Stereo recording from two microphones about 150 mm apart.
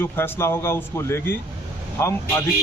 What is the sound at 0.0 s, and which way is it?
A man's voice, 15° left (ahead or behind).